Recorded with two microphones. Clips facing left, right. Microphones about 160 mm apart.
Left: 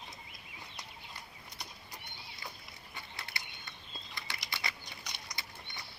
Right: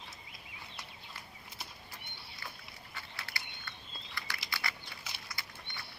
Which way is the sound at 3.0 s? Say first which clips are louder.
Even; 20° left (ahead or behind).